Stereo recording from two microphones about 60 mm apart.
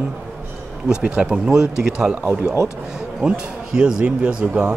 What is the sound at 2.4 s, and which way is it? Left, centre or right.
Speech, right.